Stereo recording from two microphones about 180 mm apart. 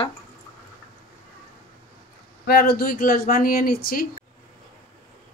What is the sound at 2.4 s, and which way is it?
Speech, 60° left (ahead or behind).